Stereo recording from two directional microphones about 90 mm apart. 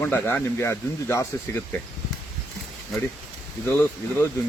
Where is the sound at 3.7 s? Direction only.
25° left (ahead or behind).